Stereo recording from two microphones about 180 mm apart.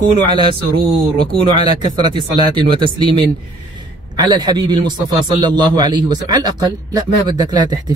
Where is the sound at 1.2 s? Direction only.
25° right (ahead or behind).